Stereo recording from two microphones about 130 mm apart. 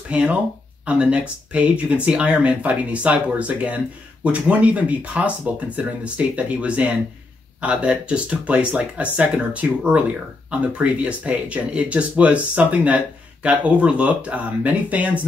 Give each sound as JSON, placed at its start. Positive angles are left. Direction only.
{"t": 0.1, "sound": "speech", "side_deg": -10}